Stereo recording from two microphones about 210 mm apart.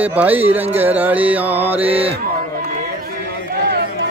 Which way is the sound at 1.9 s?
25° right (ahead or behind).